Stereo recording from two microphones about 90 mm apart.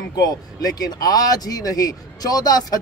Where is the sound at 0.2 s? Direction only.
45° left (ahead or behind).